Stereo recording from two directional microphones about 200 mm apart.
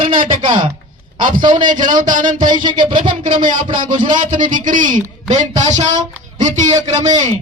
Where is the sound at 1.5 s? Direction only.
40° right (ahead or behind).